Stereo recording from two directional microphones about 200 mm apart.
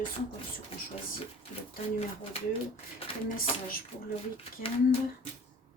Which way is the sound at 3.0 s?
30° left (ahead or behind).